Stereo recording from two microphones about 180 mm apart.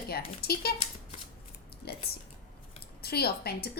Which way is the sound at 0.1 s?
60° left (ahead or behind).